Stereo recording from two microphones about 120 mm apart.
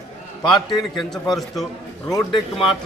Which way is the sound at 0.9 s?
Centre (ahead or behind).